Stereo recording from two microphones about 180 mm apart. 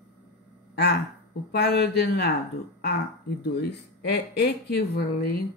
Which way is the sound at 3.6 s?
70° left (ahead or behind).